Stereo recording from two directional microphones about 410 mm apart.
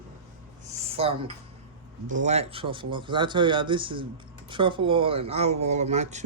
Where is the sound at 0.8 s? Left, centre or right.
Centre.